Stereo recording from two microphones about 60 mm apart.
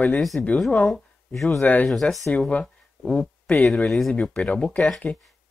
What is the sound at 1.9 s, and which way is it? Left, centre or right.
Speech, centre.